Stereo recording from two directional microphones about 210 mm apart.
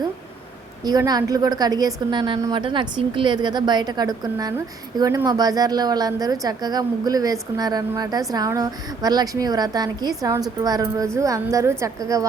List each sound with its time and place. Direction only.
0.9 s a woman's voice: 20° right (ahead or behind)